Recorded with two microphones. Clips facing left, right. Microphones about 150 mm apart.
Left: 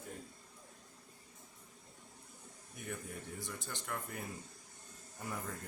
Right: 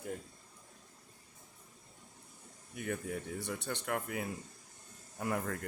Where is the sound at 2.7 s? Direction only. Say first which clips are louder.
Right 7 dB; 75° right (ahead or behind).